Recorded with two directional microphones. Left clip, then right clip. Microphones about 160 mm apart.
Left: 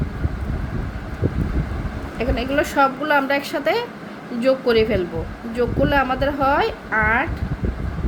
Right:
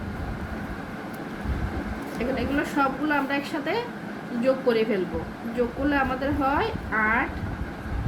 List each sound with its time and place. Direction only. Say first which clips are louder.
2.3 s a woman's voice: left 7 dB; 90° left